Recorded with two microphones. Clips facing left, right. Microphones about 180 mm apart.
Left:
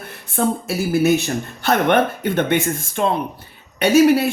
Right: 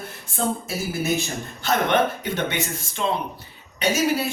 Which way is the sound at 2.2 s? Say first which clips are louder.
Left 7 dB; 55° left (ahead or behind).